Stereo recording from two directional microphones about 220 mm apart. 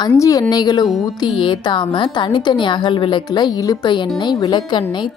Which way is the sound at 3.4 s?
20° left (ahead or behind).